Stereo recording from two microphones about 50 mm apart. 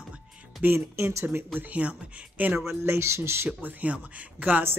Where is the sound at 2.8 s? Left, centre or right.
Right.